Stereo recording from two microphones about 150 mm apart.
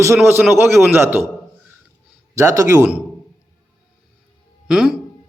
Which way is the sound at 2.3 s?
20° right (ahead or behind).